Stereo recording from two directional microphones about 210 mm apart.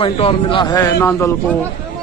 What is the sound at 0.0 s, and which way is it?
A man's voice, 25° left (ahead or behind).